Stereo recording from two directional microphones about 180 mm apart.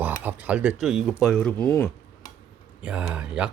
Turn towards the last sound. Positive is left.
turn(degrees=-5)  # may be behind; listen again after turning